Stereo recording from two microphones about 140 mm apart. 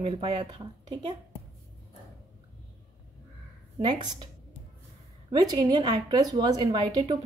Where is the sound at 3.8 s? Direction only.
35° right (ahead or behind).